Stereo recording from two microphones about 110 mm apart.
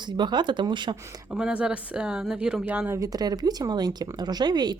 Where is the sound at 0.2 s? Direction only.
45° right (ahead or behind).